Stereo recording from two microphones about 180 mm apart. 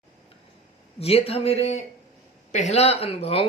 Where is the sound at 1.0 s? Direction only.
35° left (ahead or behind).